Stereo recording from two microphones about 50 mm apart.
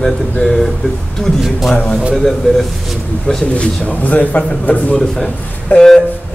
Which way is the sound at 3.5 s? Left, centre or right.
Left.